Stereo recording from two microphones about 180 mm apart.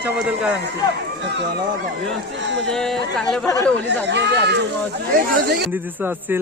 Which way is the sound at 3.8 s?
75° right (ahead or behind).